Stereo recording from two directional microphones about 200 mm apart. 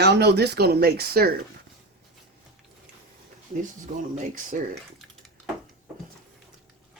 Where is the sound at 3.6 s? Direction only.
40° right (ahead or behind).